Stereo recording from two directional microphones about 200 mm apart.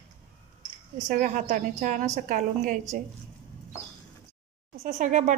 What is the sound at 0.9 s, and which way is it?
A woman's voice, 40° right (ahead or behind).